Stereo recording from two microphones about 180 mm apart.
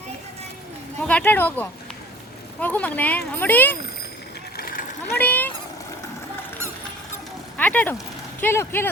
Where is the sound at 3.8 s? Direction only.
65° left (ahead or behind).